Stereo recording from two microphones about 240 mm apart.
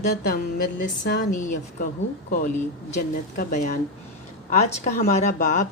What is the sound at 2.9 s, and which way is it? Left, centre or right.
A woman's voice, left.